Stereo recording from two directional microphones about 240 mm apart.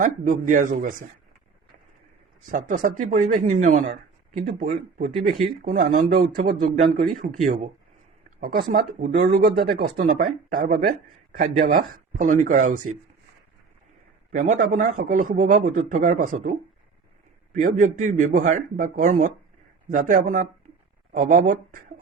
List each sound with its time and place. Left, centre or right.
0.0 s speech: right
2.5 s speech: right
5.6 s speech: right
14.3 s speech: right